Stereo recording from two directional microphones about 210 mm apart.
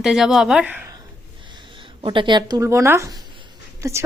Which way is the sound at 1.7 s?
25° right (ahead or behind).